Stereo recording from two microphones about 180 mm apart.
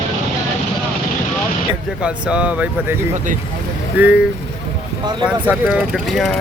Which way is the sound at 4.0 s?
10° right (ahead or behind).